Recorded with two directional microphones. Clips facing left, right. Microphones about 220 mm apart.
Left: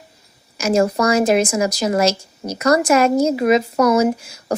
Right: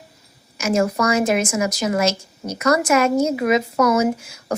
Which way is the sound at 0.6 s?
35° left (ahead or behind).